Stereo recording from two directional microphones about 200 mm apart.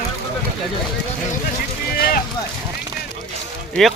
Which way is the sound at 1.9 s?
45° left (ahead or behind).